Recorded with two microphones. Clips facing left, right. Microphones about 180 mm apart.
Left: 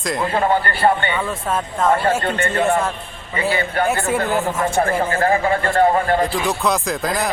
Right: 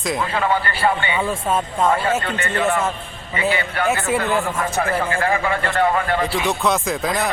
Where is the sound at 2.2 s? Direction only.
45° left (ahead or behind).